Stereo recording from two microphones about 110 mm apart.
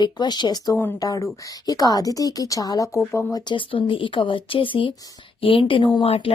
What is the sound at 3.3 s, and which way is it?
A woman's voice, 45° left (ahead or behind).